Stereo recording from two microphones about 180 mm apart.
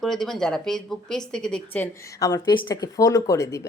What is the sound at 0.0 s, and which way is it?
Speech, centre (ahead or behind).